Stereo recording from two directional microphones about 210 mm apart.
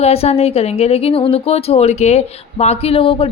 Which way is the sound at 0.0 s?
30° left (ahead or behind).